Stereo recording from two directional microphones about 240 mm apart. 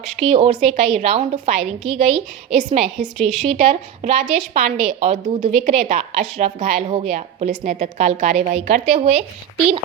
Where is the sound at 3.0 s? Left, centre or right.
Centre.